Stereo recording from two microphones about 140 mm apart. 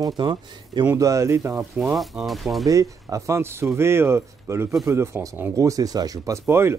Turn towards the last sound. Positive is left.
turn(degrees=-20)  # may be behind; listen again after turning